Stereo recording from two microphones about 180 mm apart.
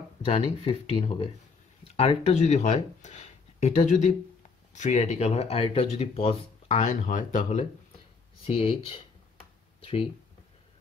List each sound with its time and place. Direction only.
0.2 s speech: 35° left (ahead or behind)
8.5 s speech: 30° left (ahead or behind)